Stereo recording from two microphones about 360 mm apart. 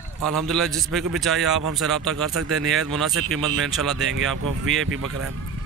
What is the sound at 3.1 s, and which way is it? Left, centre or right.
Speech, right.